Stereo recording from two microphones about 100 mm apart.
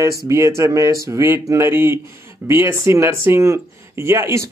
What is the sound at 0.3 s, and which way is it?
Speech, 30° right (ahead or behind).